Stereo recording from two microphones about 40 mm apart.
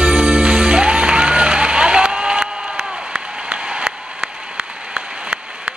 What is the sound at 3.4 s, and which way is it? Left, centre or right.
Applause, right.